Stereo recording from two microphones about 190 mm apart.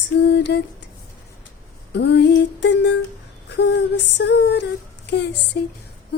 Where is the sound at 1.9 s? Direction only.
65° left (ahead or behind).